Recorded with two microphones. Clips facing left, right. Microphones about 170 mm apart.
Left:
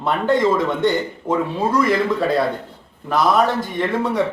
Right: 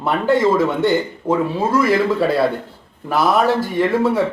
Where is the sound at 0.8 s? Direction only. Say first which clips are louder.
Right 2 dB; 5° right (ahead or behind).